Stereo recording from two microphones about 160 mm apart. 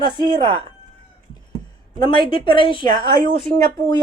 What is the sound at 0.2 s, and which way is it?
Speech, 25° right (ahead or behind).